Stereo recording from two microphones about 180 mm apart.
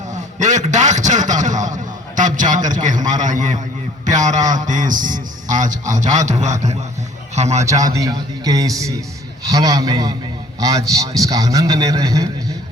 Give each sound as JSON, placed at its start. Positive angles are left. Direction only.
{"t": 0.1, "sound": "a sound", "side_deg": -40}
{"t": 3.1, "sound": "a man's voice", "side_deg": -45}
{"t": 7.6, "sound": "a man's voice", "side_deg": -20}